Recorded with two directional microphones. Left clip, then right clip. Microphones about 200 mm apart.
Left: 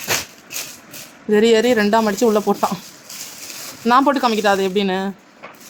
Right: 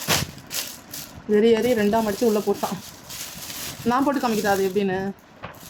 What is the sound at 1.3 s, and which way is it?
Speech, 30° left (ahead or behind).